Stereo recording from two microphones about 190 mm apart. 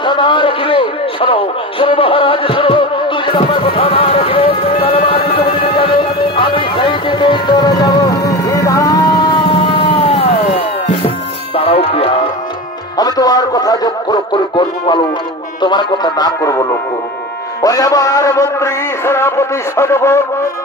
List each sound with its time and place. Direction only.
0.0 s a sound: 25° left (ahead or behind)
11.5 s music: 30° left (ahead or behind)
12.9 s music: 20° left (ahead or behind)
15.6 s a man's voice: 25° left (ahead or behind)